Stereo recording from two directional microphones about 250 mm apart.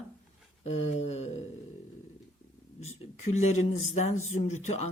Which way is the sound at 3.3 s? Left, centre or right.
Left.